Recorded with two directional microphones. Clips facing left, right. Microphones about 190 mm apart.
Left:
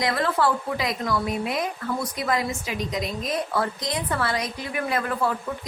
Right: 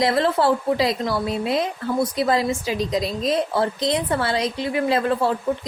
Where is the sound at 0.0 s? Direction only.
30° right (ahead or behind).